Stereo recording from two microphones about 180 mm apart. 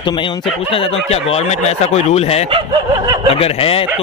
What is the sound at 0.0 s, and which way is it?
Speech, 25° left (ahead or behind).